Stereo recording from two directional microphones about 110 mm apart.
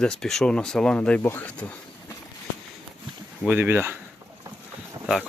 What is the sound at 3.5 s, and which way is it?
Speech, 20° right (ahead or behind).